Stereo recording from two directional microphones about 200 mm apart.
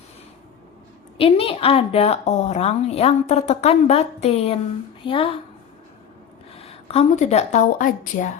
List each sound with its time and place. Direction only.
1.2 s a woman's voice: 25° left (ahead or behind)
6.6 s speech: 30° left (ahead or behind)